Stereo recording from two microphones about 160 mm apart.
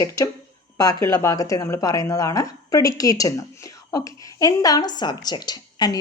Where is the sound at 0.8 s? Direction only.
20° left (ahead or behind).